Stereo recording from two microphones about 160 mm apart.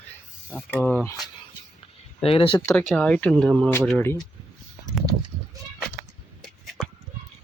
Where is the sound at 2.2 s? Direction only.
35° left (ahead or behind).